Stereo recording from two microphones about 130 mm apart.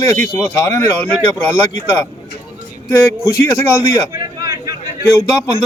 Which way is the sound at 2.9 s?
20° left (ahead or behind).